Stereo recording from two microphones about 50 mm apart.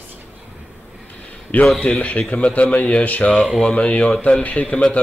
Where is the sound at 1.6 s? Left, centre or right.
Centre.